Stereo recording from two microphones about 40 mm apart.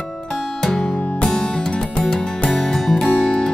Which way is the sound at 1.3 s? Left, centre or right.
Left.